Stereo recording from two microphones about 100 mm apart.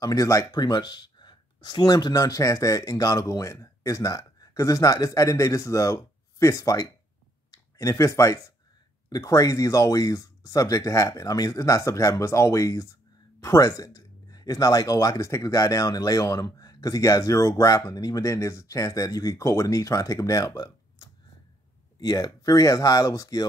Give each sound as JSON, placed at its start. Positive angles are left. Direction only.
{"t": 0.0, "sound": "speech", "side_deg": 35}